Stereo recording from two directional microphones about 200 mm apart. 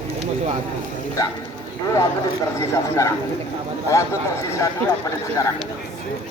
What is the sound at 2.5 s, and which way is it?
Speech, 15° left (ahead or behind).